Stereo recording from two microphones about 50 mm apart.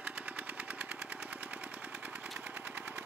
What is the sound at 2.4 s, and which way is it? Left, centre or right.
Machine gun, right.